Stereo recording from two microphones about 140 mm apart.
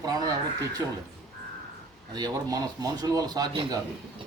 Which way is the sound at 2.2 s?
30° right (ahead or behind).